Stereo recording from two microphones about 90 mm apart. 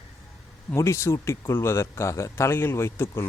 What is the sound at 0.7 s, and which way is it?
Speech, 35° left (ahead or behind).